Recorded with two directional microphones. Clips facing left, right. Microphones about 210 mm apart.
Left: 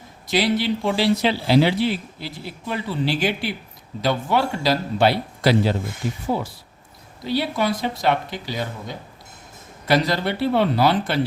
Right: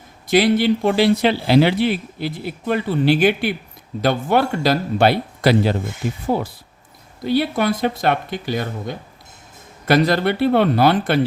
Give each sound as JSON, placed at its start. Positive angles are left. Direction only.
{"t": 0.3, "sound": "speech", "side_deg": -50}